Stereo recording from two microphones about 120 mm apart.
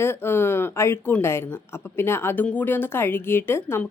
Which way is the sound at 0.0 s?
20° left (ahead or behind).